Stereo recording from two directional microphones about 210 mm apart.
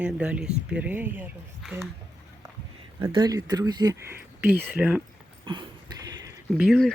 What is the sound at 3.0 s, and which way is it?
Speech, 15° right (ahead or behind).